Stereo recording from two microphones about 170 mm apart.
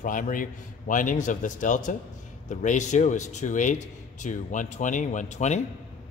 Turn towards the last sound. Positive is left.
turn(degrees=45)  # may be behind; listen again after turning